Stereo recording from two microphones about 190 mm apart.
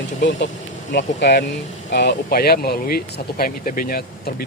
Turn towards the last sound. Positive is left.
turn(degrees=50)  # may be behind; listen again after turning